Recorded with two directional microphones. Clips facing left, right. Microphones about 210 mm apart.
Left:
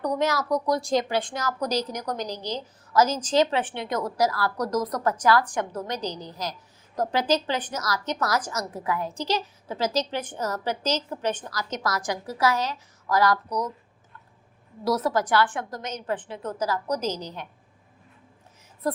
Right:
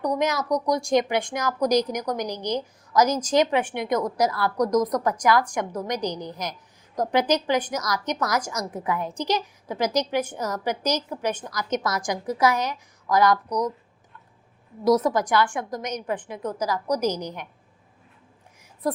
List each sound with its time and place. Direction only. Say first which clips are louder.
0.0 s a woman's voice: right 1 dB; 15° right (ahead or behind)
14.8 s a woman's voice: right 4 dB; 15° right (ahead or behind)